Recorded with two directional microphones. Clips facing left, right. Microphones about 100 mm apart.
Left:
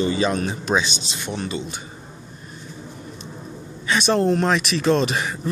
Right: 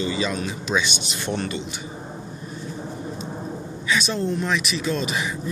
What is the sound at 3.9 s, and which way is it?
Speech, 65° left (ahead or behind).